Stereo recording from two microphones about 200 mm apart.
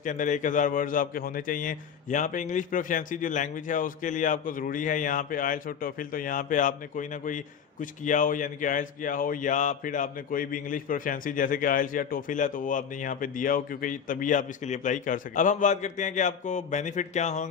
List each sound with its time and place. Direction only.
0.0 s a man's voice: 40° left (ahead or behind)